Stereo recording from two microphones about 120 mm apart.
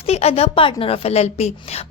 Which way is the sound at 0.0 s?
60° left (ahead or behind).